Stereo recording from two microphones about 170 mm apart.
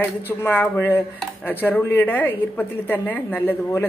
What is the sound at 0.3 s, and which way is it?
Speech, 10° left (ahead or behind).